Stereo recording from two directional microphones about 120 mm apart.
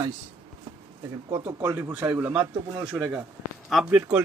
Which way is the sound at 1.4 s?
25° right (ahead or behind).